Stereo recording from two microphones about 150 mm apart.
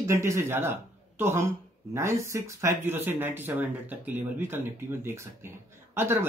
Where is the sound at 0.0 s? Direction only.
20° right (ahead or behind).